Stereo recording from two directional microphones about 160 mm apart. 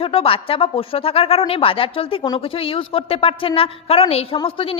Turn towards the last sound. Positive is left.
turn(degrees=35)  # may be behind; listen again after turning